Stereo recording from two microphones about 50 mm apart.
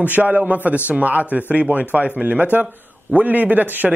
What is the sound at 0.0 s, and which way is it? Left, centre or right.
Speech, right.